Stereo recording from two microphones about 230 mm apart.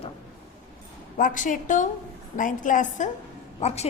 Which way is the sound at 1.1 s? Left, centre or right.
Left.